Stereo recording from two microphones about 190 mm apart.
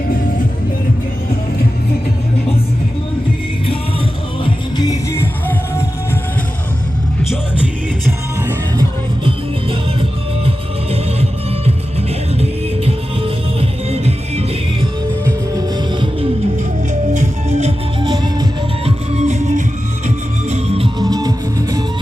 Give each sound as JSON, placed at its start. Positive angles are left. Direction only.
{"t": 4.4, "sound": "music", "side_deg": 20}
{"t": 10.9, "sound": "music", "side_deg": -30}
{"t": 15.5, "sound": "music", "side_deg": -20}
{"t": 17.2, "sound": "music", "side_deg": -35}
{"t": 18.0, "sound": "music", "side_deg": -25}
{"t": 18.9, "sound": "music", "side_deg": -35}